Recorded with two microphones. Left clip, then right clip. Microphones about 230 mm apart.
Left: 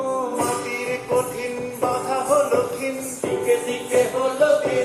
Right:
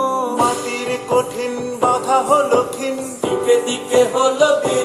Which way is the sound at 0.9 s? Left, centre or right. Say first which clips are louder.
Right 5 dB; right.